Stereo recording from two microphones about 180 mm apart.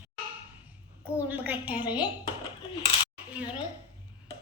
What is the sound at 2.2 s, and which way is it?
Dishes, 25° left (ahead or behind).